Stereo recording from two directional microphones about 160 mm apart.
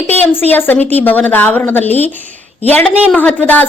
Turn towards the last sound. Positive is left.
turn(degrees=10)  # may be behind; listen again after turning